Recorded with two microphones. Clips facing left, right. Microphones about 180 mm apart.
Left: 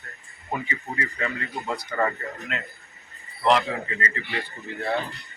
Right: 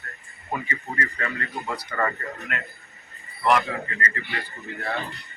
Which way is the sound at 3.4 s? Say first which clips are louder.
Left 1 dB; 25° left (ahead or behind).